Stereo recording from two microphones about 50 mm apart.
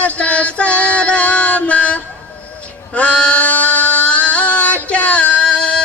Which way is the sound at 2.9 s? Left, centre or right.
Left.